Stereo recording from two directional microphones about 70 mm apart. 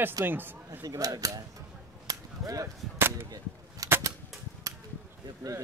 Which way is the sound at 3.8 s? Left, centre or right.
Right.